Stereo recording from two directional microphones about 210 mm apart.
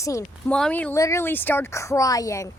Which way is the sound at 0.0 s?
15° left (ahead or behind).